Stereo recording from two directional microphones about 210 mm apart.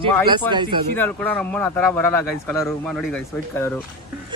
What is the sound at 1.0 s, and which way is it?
Speech, 5° left (ahead or behind).